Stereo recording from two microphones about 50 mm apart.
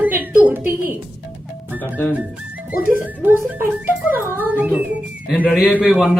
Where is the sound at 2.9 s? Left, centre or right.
Right.